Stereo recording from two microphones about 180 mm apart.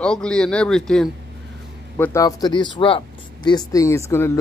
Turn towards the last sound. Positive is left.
turn(degrees=15)  # may be behind; listen again after turning